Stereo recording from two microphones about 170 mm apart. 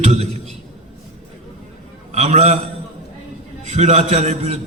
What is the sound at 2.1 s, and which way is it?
Speech, 40° right (ahead or behind).